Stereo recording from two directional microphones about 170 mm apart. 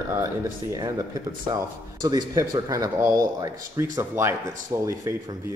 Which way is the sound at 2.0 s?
20° right (ahead or behind).